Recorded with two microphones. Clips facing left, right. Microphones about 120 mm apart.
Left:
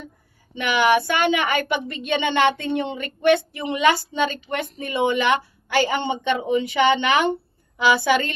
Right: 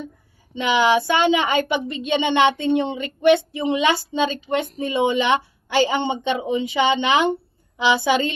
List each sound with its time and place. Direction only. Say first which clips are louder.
0.5 s a woman's voice: right 1 dB; 20° right (ahead or behind)